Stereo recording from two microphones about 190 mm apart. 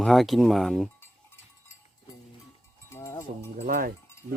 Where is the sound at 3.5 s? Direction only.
45° right (ahead or behind).